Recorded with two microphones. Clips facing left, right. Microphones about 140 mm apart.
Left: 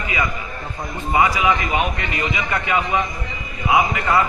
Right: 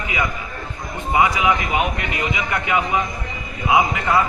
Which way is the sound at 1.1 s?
20° right (ahead or behind).